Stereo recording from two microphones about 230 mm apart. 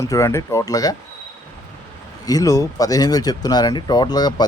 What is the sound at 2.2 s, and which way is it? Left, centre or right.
Speech, centre.